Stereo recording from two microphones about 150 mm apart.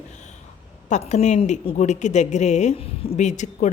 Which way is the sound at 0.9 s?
50° left (ahead or behind).